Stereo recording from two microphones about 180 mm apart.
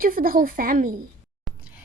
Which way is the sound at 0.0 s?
55° right (ahead or behind).